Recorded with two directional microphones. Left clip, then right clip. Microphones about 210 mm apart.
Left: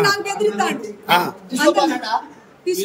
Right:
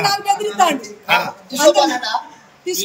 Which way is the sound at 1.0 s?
20° left (ahead or behind).